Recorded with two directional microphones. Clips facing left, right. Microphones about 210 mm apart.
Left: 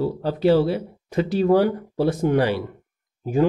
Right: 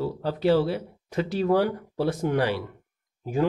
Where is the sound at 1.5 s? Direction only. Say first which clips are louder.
Left 4 dB; 10° left (ahead or behind).